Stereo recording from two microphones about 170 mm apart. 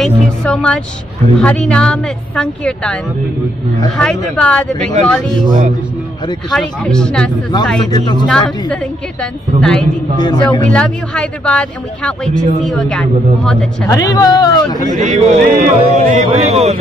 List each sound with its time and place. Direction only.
0.0 s speech: 5° left (ahead or behind)
6.5 s speech: 5° left (ahead or behind)
7.9 s speech: 25° left (ahead or behind)
8.3 s speech: 5° left (ahead or behind)
10.2 s speech: 25° left (ahead or behind)
10.7 s speech: 5° left (ahead or behind)
13.8 s speech: 20° left (ahead or behind)
14.9 s a man's voice: 45° right (ahead or behind)